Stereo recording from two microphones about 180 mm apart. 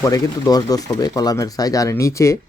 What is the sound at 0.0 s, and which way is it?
Speech, 20° left (ahead or behind).